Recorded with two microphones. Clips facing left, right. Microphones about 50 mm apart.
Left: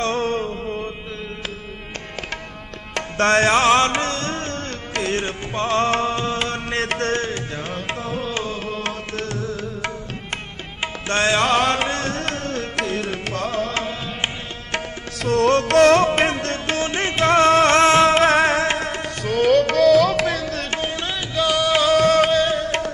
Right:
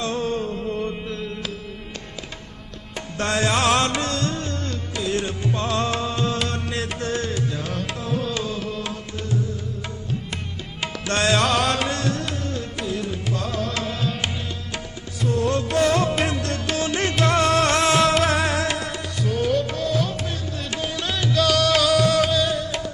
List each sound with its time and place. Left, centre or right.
0.0 s music: left
0.4 s music: left
2.9 s music: left
6.8 s music: left
7.2 s music: left
11.1 s music: left
13.4 s music: left
15.2 s music: left
19.2 s music: left
20.7 s music: left
21.1 s music: left